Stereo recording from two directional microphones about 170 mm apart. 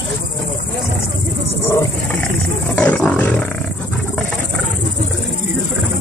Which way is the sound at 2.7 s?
5° left (ahead or behind).